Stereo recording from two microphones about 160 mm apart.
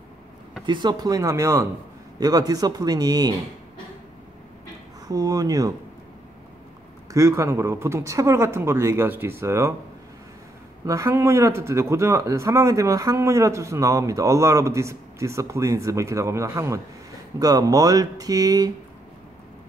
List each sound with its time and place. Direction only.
0.7 s speech: 25° right (ahead or behind)
5.0 s speech: 25° right (ahead or behind)
7.1 s speech: 20° right (ahead or behind)
10.9 s speech: 20° right (ahead or behind)